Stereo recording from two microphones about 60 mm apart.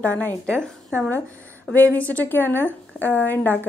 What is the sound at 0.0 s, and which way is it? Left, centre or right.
Speech, left.